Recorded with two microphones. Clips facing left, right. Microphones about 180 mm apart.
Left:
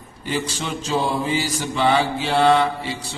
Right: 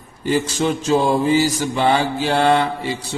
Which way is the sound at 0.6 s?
45° right (ahead or behind).